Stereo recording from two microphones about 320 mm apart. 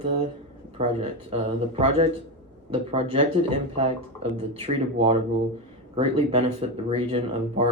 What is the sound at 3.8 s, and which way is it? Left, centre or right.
Speech, centre.